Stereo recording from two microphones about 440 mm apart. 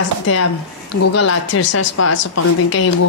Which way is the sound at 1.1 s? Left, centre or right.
Left.